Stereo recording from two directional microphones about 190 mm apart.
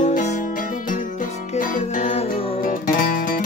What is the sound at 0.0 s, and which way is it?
Music, 40° left (ahead or behind).